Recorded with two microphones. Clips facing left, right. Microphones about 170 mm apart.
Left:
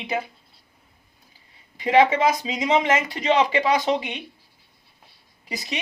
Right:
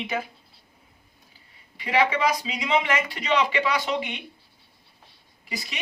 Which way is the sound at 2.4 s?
40° left (ahead or behind).